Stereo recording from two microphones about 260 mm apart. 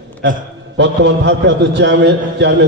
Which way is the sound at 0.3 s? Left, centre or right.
Right.